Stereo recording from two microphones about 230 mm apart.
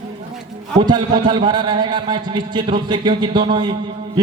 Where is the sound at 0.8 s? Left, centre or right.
Centre.